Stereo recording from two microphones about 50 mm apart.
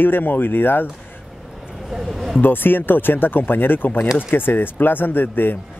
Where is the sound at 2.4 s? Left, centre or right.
Left.